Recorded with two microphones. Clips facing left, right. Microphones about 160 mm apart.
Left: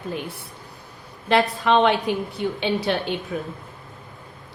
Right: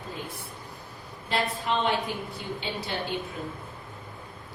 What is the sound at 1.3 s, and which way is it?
A woman's voice, 75° left (ahead or behind).